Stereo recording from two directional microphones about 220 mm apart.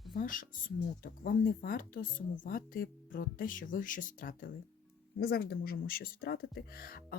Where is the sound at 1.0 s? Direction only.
40° left (ahead or behind).